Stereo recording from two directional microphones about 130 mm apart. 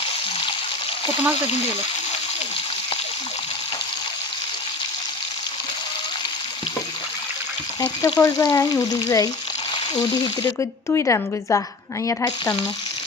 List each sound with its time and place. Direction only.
7.8 s frying: 25° left (ahead or behind)
9.9 s speech: 35° left (ahead or behind)
10.8 s frying: 20° left (ahead or behind)